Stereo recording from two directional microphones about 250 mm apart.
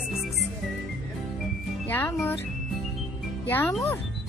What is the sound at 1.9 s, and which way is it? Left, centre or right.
Music, centre.